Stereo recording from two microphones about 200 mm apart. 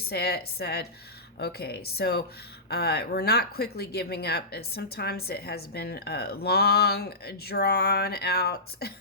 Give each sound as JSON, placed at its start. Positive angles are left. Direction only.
{"t": 0.1, "sound": "speech", "side_deg": 55}